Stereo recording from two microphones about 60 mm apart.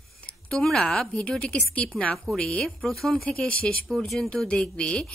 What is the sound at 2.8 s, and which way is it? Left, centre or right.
Speech, centre.